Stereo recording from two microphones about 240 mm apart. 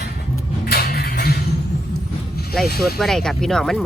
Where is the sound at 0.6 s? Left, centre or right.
Left.